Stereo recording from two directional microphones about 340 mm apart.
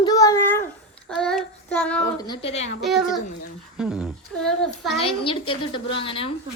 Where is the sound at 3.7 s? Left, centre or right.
Centre.